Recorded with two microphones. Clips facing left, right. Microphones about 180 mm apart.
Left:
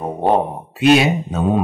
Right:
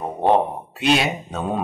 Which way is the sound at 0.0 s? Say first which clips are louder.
Left 1 dB; 5° left (ahead or behind).